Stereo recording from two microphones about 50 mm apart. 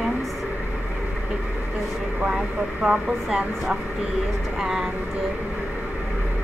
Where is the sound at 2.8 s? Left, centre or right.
Centre.